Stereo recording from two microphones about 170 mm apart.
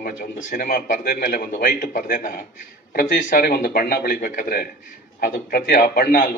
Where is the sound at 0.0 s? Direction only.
55° left (ahead or behind).